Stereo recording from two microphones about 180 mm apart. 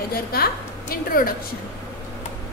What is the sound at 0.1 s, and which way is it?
A woman's voice, 60° left (ahead or behind).